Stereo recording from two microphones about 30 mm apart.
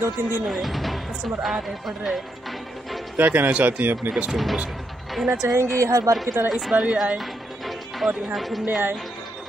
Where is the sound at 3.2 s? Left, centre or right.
Right.